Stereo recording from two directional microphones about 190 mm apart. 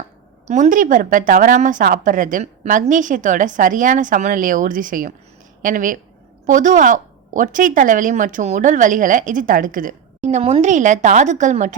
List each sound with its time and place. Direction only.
0.4 s a woman's voice: 40° right (ahead or behind)